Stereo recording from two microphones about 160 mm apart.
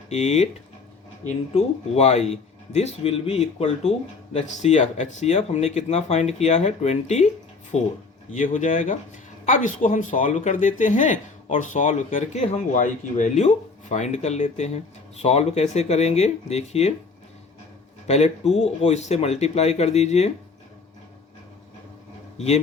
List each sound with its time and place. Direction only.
0.1 s a man's voice: 45° left (ahead or behind)
1.5 s a man's voice: 40° left (ahead or behind)
8.3 s a man's voice: 50° left (ahead or behind)
18.1 s a man's voice: 45° left (ahead or behind)
22.4 s a man's voice: 45° left (ahead or behind)